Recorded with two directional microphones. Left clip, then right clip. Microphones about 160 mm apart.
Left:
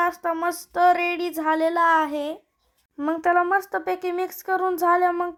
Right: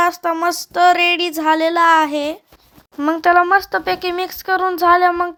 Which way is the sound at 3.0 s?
10° right (ahead or behind).